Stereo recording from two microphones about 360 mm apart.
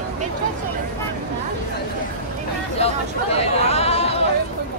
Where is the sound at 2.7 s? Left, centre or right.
Centre.